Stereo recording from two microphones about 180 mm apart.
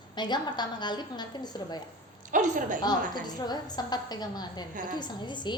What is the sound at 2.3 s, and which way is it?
Speech, 45° right (ahead or behind).